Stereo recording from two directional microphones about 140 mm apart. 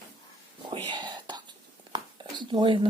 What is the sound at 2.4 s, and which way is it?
Speech, 35° right (ahead or behind).